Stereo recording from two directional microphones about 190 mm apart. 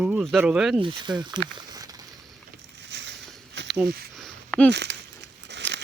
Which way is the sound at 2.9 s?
70° right (ahead or behind).